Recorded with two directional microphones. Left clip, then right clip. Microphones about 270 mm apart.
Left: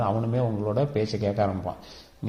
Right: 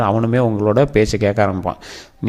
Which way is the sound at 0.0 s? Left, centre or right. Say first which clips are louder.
Right 10 dB; right.